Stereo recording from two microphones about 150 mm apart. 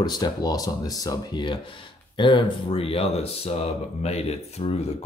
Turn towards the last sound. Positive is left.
turn(degrees=45)  # may be behind; listen again after turning